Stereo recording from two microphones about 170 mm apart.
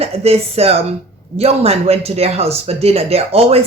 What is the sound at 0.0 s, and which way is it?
Speech, 35° right (ahead or behind).